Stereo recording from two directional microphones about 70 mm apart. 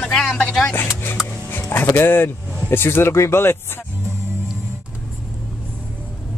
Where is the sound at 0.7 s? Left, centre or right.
Left.